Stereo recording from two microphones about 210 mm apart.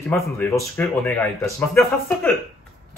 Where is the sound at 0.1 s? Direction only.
10° left (ahead or behind).